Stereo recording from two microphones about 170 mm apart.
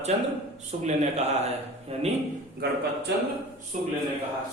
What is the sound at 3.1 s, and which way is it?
Speech, 80° right.